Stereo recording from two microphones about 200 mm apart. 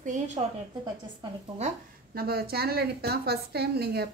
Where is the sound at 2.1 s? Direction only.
50° right (ahead or behind).